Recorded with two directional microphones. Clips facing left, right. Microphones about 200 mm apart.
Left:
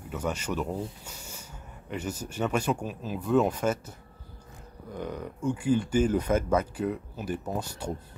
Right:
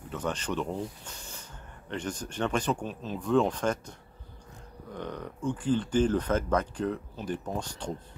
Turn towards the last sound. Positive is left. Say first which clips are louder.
# left 2 dB
turn(degrees=10)  # may be behind; listen again after turning